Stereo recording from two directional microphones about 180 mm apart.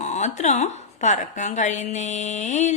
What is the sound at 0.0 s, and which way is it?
A woman's voice, 40° left (ahead or behind).